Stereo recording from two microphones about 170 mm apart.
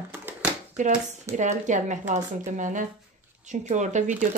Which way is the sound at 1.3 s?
45° right (ahead or behind).